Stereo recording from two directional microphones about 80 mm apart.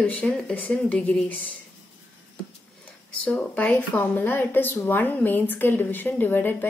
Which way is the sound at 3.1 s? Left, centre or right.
Centre.